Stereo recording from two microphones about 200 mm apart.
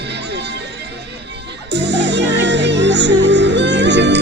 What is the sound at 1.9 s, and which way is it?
Music, 60° right (ahead or behind).